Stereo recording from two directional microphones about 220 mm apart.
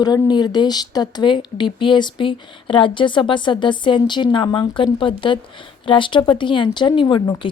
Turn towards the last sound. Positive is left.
turn(degrees=20)  # may be behind; listen again after turning